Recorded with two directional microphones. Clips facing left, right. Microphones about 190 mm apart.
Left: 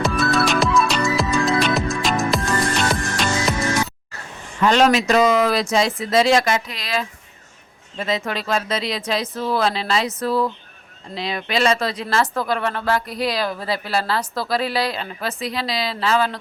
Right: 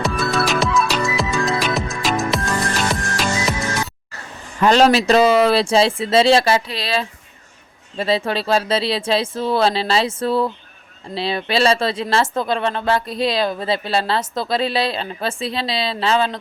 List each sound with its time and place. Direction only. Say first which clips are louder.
0.0 s music: left 1 dB; centre (ahead or behind)
4.6 s speech: right 2 dB; 35° right (ahead or behind)